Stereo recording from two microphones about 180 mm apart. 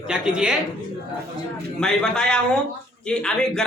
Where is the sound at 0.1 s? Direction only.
5° right (ahead or behind).